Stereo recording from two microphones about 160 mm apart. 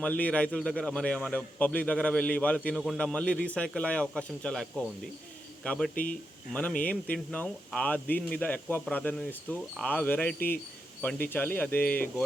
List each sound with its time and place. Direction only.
0.0 s a man's voice: 10° left (ahead or behind)
5.9 s speech: 60° left (ahead or behind)
6.5 s a man's voice: 5° left (ahead or behind)